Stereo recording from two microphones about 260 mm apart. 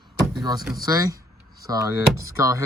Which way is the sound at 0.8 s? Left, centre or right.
Centre.